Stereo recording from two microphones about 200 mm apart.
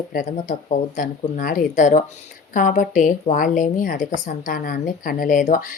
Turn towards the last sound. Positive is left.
turn(degrees=40)  # may be behind; listen again after turning